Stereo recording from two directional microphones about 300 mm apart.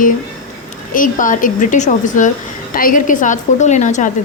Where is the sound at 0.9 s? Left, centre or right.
Left.